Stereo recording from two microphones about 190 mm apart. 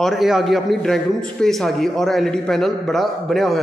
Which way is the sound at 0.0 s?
Centre (ahead or behind).